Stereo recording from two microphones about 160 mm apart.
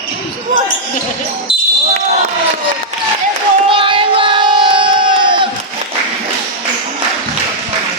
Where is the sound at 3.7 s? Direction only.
30° right (ahead or behind).